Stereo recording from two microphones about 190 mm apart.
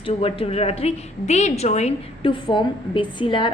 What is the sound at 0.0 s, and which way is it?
A woman's voice, 30° left (ahead or behind).